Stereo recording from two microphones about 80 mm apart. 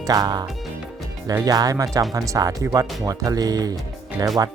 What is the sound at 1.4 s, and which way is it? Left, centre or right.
Speech, right.